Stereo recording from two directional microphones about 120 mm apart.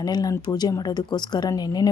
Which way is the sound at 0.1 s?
35° left (ahead or behind).